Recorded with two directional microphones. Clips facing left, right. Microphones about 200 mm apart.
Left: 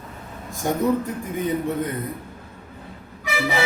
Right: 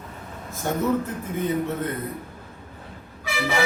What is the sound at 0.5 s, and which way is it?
Speech, 15° left (ahead or behind).